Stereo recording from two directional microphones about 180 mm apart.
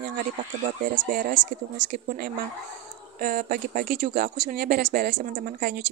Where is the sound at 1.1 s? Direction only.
50° right (ahead or behind).